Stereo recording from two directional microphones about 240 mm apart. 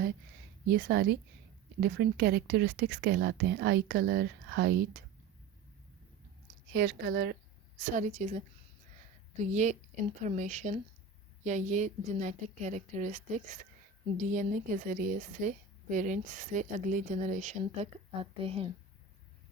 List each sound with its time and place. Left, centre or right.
0.7 s a woman's voice: right
6.7 s a woman's voice: right
9.4 s a woman's voice: right